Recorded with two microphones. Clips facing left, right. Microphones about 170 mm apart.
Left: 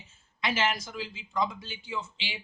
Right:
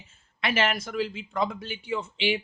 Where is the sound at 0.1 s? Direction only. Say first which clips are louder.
Right 3 dB; 60° right (ahead or behind).